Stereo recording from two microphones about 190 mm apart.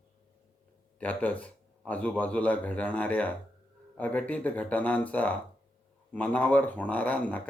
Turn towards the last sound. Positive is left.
turn(degrees=5)  # may be behind; listen again after turning